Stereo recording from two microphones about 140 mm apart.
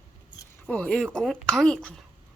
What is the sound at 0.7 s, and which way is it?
Speech, 10° left (ahead or behind).